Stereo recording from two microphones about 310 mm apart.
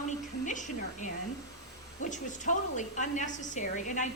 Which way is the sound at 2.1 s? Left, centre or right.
Left.